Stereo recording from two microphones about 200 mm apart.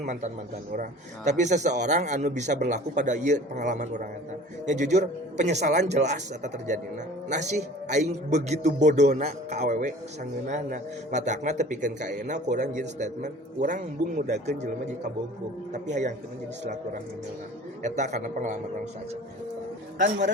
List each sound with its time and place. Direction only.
0.0 s a man's voice: 35° right (ahead or behind)
15.7 s a man's voice: 35° right (ahead or behind)
17.8 s a man's voice: 35° right (ahead or behind)
20.0 s a man's voice: 40° right (ahead or behind)